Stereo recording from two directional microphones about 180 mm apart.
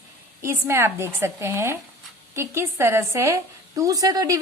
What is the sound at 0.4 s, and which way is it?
A woman's voice, 15° right (ahead or behind).